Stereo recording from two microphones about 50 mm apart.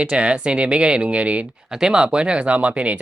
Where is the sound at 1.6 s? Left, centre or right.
Centre; by 2.9 s right.